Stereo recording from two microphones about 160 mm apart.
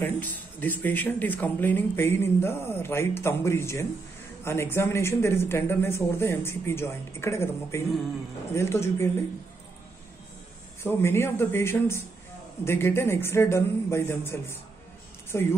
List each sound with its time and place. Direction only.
0.0 s speech: 10° left (ahead or behind)
10.8 s speech: 15° left (ahead or behind)